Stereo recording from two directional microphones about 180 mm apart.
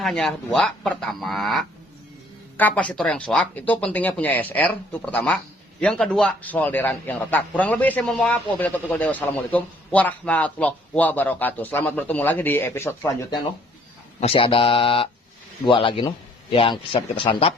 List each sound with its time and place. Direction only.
0.0 s a man's voice: 5° left (ahead or behind)
14.2 s speech: 30° left (ahead or behind)